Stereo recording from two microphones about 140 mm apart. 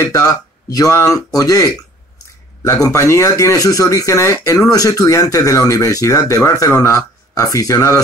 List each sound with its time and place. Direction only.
0.0 s speech: 25° left (ahead or behind)